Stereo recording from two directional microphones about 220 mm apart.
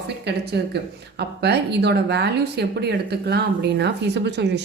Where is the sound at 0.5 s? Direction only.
50° right (ahead or behind).